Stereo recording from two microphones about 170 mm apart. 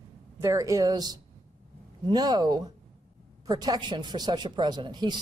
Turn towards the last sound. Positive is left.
turn(degrees=-25)  # may be behind; listen again after turning